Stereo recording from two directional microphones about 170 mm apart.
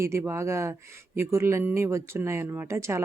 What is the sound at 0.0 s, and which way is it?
Speech, 15° right (ahead or behind).